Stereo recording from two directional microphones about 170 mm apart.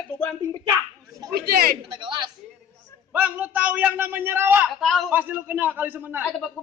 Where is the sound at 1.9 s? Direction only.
25° right (ahead or behind).